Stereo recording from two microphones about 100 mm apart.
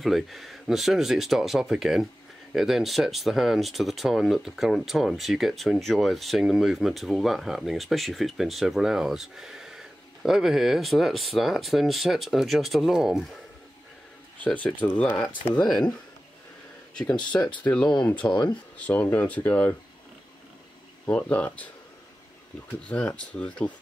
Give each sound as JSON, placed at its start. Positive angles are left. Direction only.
{"t": 0.0, "sound": "speech", "side_deg": 0}
{"t": 14.4, "sound": "speech", "side_deg": 15}
{"t": 16.9, "sound": "speech", "side_deg": 10}
{"t": 18.2, "sound": "speech", "side_deg": 25}
{"t": 18.8, "sound": "speech", "side_deg": 15}
{"t": 21.0, "sound": "speech", "side_deg": 10}
{"t": 22.8, "sound": "speech", "side_deg": 10}